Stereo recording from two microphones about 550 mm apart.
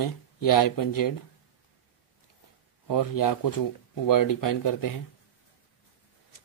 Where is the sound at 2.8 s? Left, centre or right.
Left.